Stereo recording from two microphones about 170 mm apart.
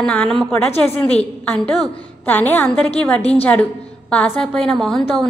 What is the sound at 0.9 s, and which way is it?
Speech, 40° left (ahead or behind).